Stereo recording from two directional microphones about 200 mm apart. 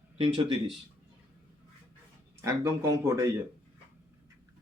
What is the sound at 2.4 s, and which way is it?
Speech, 15° right (ahead or behind).